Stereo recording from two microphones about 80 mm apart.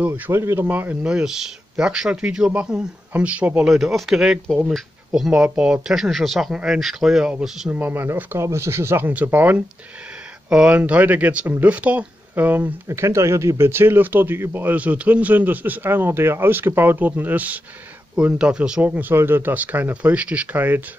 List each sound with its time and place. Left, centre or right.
0.3 s speech: right
0.7 s speech: right
1.0 s speech: centre
3.7 s speech: centre
7.7 s speech: right
12.8 s speech: right
18.1 s speech: centre